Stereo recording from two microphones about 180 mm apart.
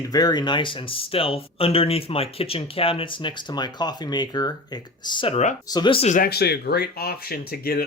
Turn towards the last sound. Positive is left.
turn(degrees=55)  # may be behind; listen again after turning